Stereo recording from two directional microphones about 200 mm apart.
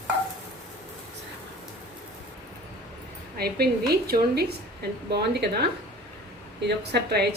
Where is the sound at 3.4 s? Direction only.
50° right (ahead or behind).